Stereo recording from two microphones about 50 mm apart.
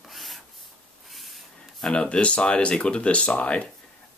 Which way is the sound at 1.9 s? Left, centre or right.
Centre.